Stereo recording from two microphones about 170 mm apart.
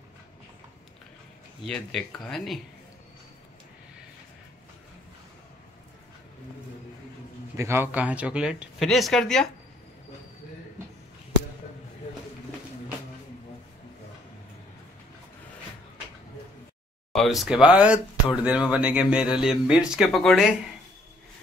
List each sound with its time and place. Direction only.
1.6 s speech: centre (ahead or behind)
7.5 s speech: 15° right (ahead or behind); by 9.5 s 5° left (ahead or behind)
17.1 s speech: centre (ahead or behind)